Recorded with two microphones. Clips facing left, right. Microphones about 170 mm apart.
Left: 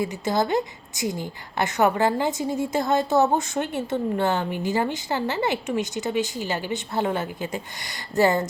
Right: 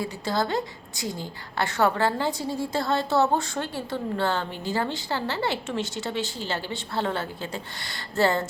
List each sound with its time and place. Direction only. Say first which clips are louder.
0.0 s a woman's voice: left 3 dB; 20° left (ahead or behind)